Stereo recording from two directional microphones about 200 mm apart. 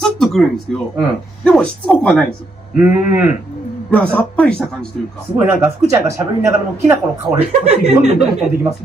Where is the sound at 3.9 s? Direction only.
5° left (ahead or behind).